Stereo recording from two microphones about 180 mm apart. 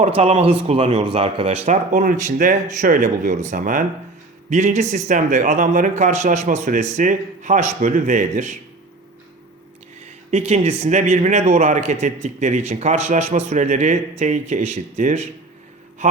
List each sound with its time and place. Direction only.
0.2 s speech: 35° right (ahead or behind)
10.0 s speech: 35° right (ahead or behind)